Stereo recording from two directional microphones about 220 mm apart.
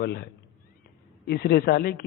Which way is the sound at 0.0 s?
45° left (ahead or behind).